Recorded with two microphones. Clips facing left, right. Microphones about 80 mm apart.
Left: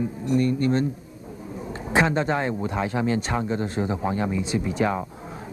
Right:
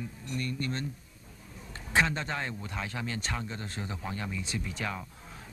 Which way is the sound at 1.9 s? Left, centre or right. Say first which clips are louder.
Left 7 dB; centre.